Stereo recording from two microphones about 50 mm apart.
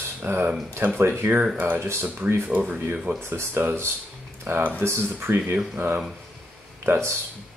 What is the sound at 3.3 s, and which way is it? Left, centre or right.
Speech, right.